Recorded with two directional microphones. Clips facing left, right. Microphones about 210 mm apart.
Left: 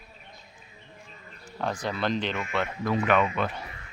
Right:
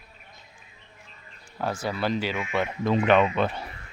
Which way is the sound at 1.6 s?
5° right (ahead or behind).